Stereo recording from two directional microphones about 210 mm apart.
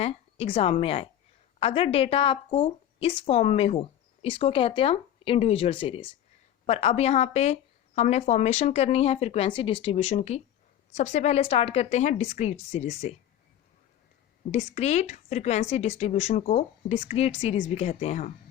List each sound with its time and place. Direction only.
0.0 s a woman's voice: 30° left (ahead or behind)
14.5 s speech: 30° left (ahead or behind)